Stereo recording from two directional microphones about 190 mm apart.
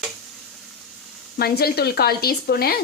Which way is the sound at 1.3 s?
55° left (ahead or behind).